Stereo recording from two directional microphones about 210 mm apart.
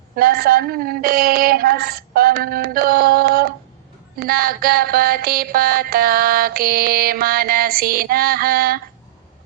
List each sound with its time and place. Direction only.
0.2 s mantra: 45° right (ahead or behind)